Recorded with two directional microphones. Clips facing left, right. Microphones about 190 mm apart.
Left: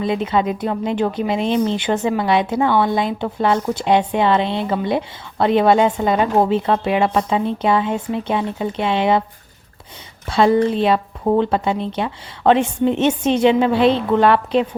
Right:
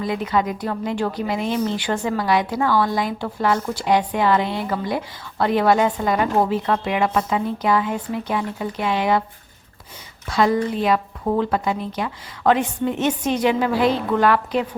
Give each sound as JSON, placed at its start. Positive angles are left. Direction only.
{"t": 0.0, "sound": "speech", "side_deg": 25}
{"t": 10.2, "sound": "speech", "side_deg": 25}